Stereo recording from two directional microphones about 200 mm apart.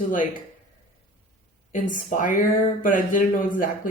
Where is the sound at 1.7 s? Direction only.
40° left (ahead or behind).